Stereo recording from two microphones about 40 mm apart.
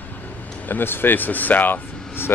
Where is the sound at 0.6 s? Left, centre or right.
Left.